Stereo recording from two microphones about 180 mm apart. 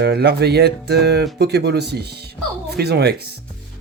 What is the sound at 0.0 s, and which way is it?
Speech, 65° right (ahead or behind).